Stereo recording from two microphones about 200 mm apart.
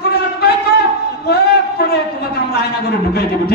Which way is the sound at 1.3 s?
50° left (ahead or behind).